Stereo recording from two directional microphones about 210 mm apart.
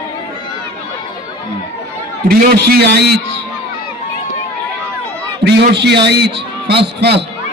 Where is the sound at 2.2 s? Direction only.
45° right (ahead or behind).